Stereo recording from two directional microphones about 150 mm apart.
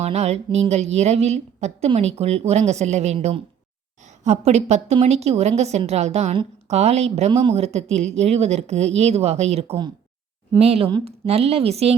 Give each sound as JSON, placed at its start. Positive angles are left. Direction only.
{"t": 0.0, "sound": "a woman's voice", "side_deg": -45}